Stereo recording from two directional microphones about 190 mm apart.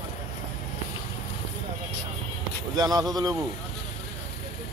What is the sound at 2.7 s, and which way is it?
Speech, 20° right (ahead or behind).